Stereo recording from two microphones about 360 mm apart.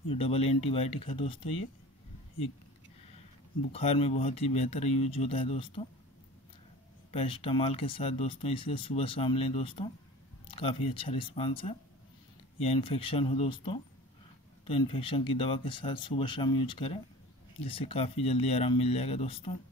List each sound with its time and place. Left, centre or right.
0.1 s speech: centre
3.7 s speech: centre
7.1 s speech: centre